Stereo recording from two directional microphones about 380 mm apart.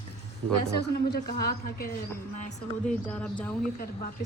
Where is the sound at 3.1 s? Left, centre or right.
Centre.